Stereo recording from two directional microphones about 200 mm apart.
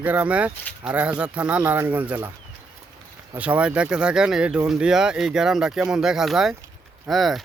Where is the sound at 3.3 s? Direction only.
5° right (ahead or behind).